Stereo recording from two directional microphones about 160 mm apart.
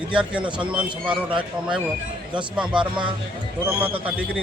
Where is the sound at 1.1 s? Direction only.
30° right (ahead or behind).